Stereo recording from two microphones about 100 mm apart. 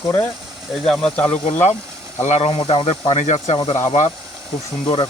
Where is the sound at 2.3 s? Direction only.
70° left (ahead or behind).